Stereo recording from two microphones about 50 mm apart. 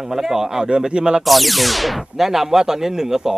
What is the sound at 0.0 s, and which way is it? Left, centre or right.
Speech, centre.